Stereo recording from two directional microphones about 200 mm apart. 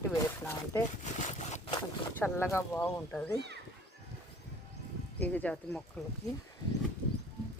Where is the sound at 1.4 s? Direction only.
35° left (ahead or behind).